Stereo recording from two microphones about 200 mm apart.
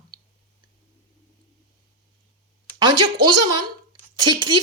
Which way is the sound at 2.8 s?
20° right (ahead or behind).